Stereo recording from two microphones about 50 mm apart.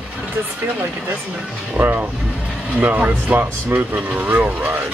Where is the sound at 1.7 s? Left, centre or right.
Right.